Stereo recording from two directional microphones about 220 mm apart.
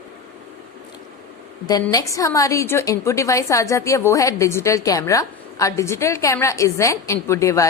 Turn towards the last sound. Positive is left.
turn(degrees=15)  # may be behind; listen again after turning